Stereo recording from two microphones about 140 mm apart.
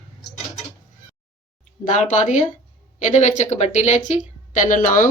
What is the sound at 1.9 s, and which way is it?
A woman's voice, 60° left (ahead or behind).